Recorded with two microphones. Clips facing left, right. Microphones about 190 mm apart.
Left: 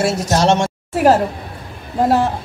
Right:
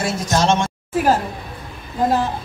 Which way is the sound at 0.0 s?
75° left (ahead or behind).